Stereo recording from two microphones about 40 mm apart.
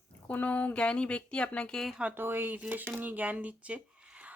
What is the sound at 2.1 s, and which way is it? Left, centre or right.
Speech, right.